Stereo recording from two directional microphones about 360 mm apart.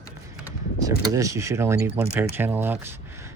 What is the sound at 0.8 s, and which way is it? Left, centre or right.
Speech, centre.